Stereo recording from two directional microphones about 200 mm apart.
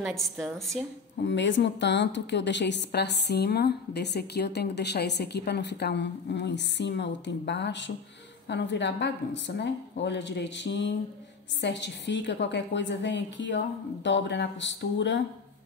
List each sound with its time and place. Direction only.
0.0 s a woman's voice: centre (ahead or behind)
1.2 s a woman's voice: 65° left (ahead or behind)